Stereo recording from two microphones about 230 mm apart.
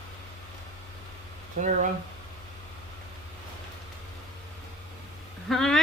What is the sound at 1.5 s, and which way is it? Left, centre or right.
Speech, right.